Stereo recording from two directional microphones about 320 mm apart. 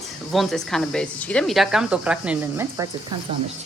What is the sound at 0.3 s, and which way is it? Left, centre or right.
Speech, centre.